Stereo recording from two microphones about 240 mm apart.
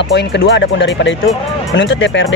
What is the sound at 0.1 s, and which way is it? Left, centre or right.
Speech, left.